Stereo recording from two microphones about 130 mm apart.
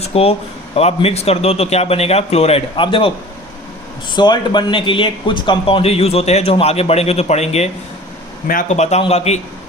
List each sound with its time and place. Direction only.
0.0 s speech: 50° left (ahead or behind)
4.1 s speech: 35° left (ahead or behind); by 7.7 s 55° left (ahead or behind)
8.4 s speech: 75° left (ahead or behind); by 9.4 s 55° left (ahead or behind)